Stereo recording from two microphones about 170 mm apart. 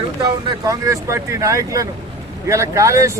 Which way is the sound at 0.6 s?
20° right (ahead or behind).